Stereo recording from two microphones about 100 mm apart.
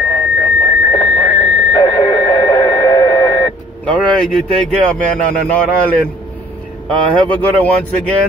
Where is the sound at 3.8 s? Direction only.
10° left (ahead or behind).